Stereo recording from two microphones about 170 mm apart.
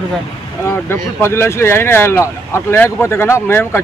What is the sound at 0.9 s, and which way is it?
Speech, 15° left (ahead or behind).